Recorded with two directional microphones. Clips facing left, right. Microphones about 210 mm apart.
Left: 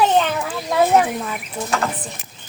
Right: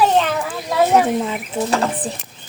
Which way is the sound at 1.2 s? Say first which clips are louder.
Right 6 dB; 30° right (ahead or behind).